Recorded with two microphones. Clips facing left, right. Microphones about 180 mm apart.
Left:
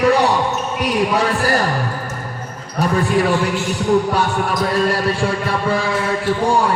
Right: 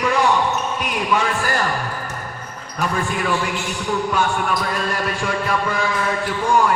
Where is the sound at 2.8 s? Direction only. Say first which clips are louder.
Left 6 dB; 35° left (ahead or behind).